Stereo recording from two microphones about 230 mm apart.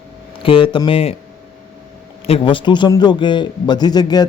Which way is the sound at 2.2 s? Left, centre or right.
Left.